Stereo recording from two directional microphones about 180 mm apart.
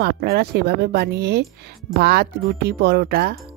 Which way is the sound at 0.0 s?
65° right (ahead or behind).